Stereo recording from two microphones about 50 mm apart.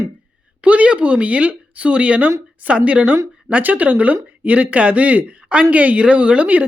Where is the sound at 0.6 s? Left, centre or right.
Right.